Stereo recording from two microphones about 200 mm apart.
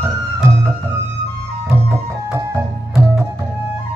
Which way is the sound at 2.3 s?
15° right (ahead or behind).